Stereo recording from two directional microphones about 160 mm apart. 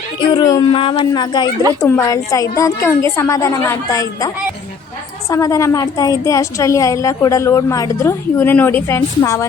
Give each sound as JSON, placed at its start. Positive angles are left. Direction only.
{"t": 0.3, "sound": "a woman's voice", "side_deg": 25}
{"t": 5.3, "sound": "a woman's voice", "side_deg": 20}